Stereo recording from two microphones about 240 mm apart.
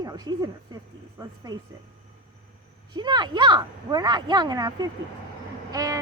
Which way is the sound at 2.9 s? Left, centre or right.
Centre.